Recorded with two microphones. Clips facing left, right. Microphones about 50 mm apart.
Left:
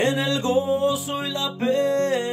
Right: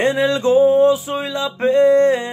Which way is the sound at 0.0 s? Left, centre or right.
Right.